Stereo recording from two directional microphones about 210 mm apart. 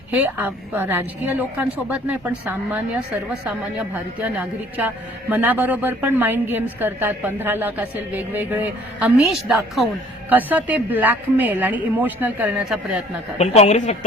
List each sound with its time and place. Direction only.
0.1 s a woman's voice: 10° right (ahead or behind)
13.4 s a woman's voice: 30° left (ahead or behind)